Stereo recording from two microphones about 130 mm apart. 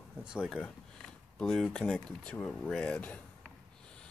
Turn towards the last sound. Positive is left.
turn(degrees=5)  # may be behind; listen again after turning